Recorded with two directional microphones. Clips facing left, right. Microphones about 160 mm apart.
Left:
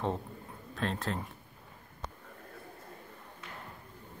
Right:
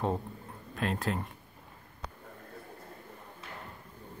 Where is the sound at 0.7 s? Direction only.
5° right (ahead or behind).